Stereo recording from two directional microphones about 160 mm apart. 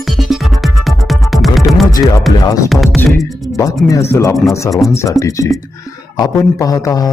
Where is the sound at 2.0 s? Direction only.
25° left (ahead or behind).